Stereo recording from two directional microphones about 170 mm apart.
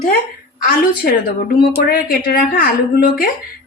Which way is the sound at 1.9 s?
60° left (ahead or behind).